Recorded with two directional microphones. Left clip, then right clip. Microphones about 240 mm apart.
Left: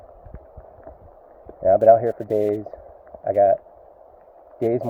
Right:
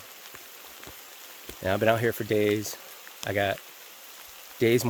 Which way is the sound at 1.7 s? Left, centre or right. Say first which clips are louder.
Left 10 dB; right.